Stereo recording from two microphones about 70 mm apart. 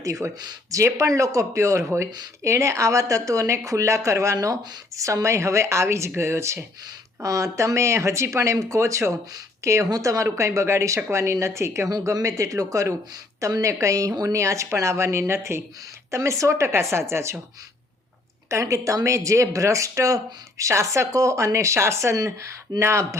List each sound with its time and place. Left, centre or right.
0.0 s speech: right
12.1 s speech: right
18.5 s speech: right
22.8 s speech: right